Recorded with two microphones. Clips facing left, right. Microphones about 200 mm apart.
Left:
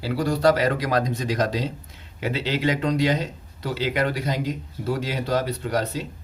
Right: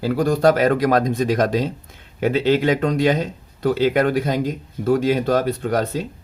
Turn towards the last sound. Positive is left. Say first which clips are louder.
# right 4 dB
turn(degrees=-50)  # may be behind; listen again after turning